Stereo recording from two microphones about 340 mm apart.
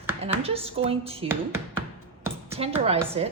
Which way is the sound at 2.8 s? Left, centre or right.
Centre.